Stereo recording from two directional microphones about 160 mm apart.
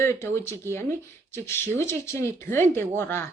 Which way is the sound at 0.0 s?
15° left (ahead or behind).